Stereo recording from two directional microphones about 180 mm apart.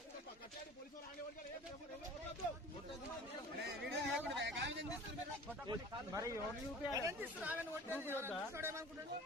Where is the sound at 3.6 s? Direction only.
70° right (ahead or behind).